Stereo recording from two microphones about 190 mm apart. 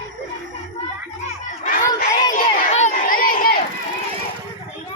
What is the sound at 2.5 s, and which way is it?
Crowd, 40° left (ahead or behind).